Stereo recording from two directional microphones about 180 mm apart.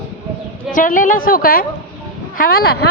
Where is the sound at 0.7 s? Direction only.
45° left (ahead or behind).